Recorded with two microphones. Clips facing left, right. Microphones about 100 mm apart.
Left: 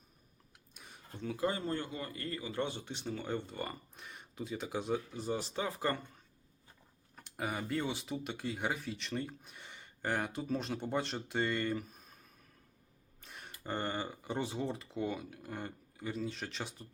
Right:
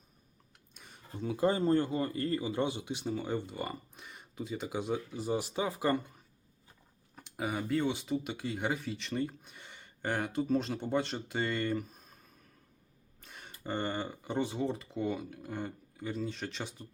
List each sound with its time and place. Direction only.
0.7 s tick-tock: centre (ahead or behind)
1.4 s speech: 30° right (ahead or behind)
2.5 s speech: 15° right (ahead or behind)
7.2 s speech: centre (ahead or behind)
13.2 s speech: centre (ahead or behind)